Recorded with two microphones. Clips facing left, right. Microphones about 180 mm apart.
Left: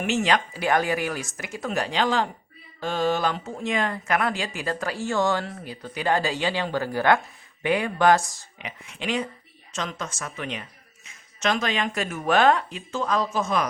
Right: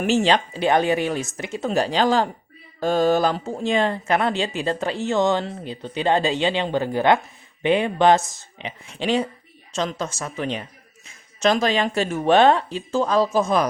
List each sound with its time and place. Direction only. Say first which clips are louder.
0.0 s speech: right 4 dB; 30° right (ahead or behind)